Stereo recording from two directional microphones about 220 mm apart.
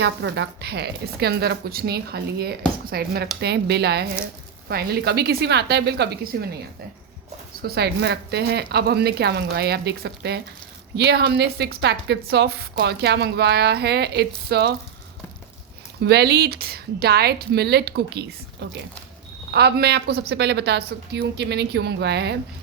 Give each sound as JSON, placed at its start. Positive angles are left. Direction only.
{"t": 0.0, "sound": "a woman's voice", "side_deg": -50}
{"t": 7.6, "sound": "a woman's voice", "side_deg": -45}
{"t": 16.0, "sound": "a woman's voice", "side_deg": -45}